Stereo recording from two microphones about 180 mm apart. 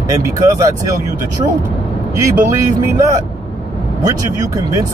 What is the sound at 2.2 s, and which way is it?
Speech, 20° right (ahead or behind).